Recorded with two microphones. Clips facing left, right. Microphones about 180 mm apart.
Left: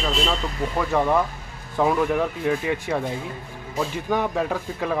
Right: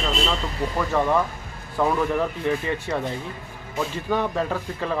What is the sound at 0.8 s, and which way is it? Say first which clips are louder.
Speech: left 1 dB; 15° left (ahead or behind).